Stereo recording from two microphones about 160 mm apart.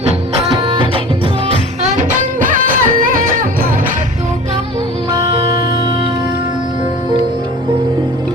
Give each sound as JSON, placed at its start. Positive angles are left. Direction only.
{"t": 0.5, "sound": "music", "side_deg": -35}
{"t": 2.0, "sound": "music", "side_deg": -55}
{"t": 5.1, "sound": "music", "side_deg": -25}